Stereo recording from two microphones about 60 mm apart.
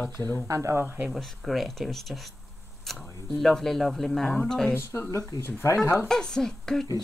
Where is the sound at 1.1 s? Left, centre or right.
Centre.